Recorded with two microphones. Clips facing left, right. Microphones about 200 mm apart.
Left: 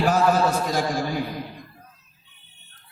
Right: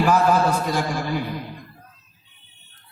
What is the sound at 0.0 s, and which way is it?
A man's voice, 45° left (ahead or behind).